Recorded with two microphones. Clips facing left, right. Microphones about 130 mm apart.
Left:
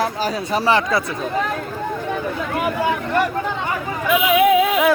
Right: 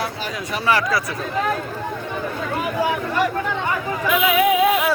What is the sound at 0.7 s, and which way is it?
Speech, 25° left (ahead or behind).